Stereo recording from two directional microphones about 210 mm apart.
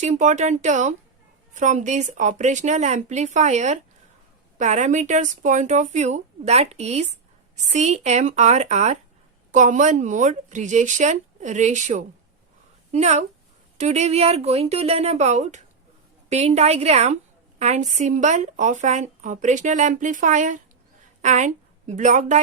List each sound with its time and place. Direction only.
0.0 s a woman's voice: 35° right (ahead or behind)